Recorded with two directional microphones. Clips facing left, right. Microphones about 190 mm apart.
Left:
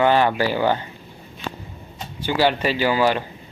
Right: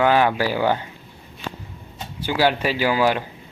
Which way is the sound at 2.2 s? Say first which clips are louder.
Even; 10° right (ahead or behind).